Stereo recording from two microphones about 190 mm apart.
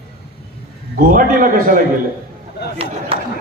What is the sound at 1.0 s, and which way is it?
Speech, 45° right (ahead or behind).